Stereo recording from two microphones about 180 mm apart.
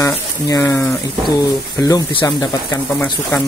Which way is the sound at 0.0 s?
15° left (ahead or behind).